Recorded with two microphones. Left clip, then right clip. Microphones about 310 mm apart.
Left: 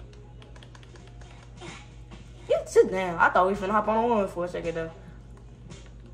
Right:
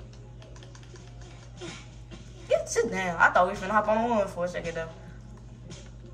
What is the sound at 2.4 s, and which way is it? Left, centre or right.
Speech, centre.